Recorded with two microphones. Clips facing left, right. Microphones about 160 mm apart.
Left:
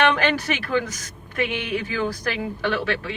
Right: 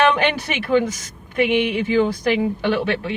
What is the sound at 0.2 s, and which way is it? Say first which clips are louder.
A woman's voice: right 2 dB; 20° right (ahead or behind).